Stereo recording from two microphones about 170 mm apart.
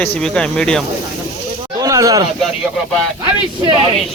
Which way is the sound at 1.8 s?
20° right (ahead or behind).